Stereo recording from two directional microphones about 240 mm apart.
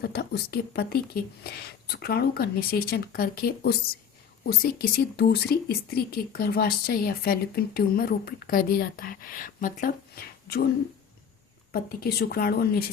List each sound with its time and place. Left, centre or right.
0.0 s speech: left
11.7 s speech: left